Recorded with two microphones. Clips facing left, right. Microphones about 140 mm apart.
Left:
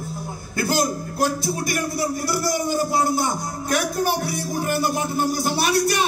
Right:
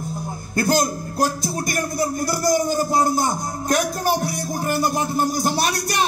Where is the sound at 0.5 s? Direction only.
45° right (ahead or behind).